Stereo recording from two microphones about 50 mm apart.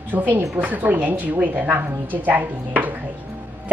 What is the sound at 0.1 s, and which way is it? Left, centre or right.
A woman's voice, right.